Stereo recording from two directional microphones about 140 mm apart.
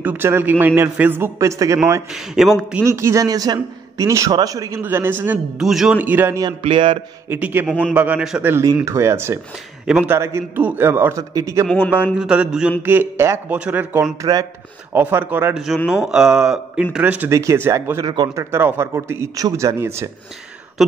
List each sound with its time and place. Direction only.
0.0 s a man's voice: 15° right (ahead or behind)
2.1 s speech: centre (ahead or behind)
2.8 s a man's voice: 20° right (ahead or behind)
5.6 s a man's voice: 5° right (ahead or behind)
6.6 s speech: 40° right (ahead or behind)
7.2 s a man's voice: 15° right (ahead or behind)
8.5 s a man's voice: 20° right (ahead or behind)
11.6 s speech: 10° left (ahead or behind)
11.9 s a man's voice: 10° right (ahead or behind)
14.2 s speech: 35° right (ahead or behind)
14.9 s a man's voice: 15° right (ahead or behind)
17.3 s a man's voice: 20° right (ahead or behind)